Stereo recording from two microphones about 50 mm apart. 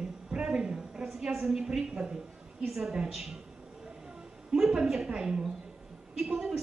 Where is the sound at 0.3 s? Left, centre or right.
Centre.